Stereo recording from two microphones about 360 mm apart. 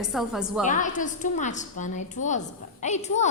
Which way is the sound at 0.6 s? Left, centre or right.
Left.